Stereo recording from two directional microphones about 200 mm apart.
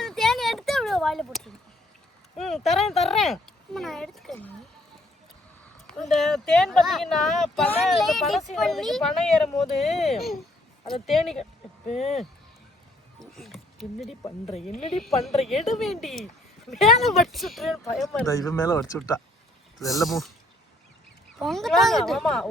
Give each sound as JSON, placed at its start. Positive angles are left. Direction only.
{"t": 0.0, "sound": "a sound", "side_deg": 0}
{"t": 2.4, "sound": "speech", "side_deg": 0}
{"t": 5.9, "sound": "speech", "side_deg": 0}
{"t": 11.9, "sound": "speech", "side_deg": 30}
{"t": 13.1, "sound": "music", "side_deg": 0}
{"t": 14.7, "sound": "speech", "side_deg": 35}
{"t": 14.9, "sound": "speech", "side_deg": 0}
{"t": 18.3, "sound": "speech", "side_deg": 15}
{"t": 19.8, "sound": "speech", "side_deg": 0}
{"t": 21.3, "sound": "speech", "side_deg": 0}